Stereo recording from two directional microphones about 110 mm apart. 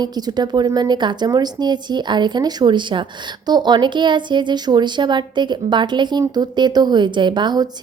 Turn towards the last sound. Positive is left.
turn(degrees=-40)  # may be behind; listen again after turning